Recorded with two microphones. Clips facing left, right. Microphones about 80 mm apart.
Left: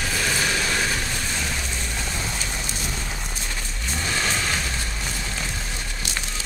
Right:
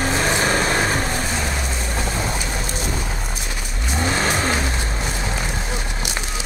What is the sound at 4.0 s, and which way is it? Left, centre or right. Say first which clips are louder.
Vehicle: right 6 dB; right.